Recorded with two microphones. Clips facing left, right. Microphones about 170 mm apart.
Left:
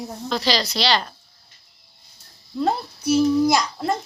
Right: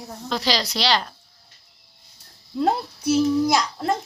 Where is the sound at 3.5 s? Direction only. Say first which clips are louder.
Left 1 dB; centre (ahead or behind).